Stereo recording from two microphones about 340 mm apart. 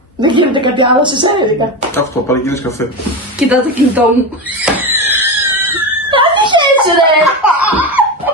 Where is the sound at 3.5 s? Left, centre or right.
Centre.